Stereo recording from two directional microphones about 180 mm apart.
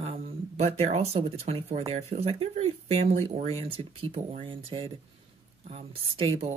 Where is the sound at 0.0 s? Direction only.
35° right (ahead or behind).